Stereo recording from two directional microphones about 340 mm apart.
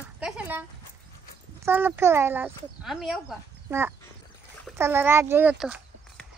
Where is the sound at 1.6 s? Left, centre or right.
Centre.